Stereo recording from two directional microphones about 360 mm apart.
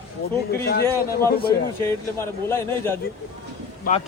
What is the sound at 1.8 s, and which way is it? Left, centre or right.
Speech, centre.